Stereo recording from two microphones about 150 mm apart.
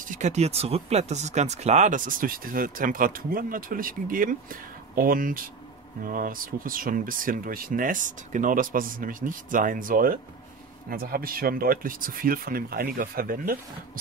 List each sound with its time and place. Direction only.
0.0 s speech: 55° right (ahead or behind); by 13.6 s 75° right (ahead or behind)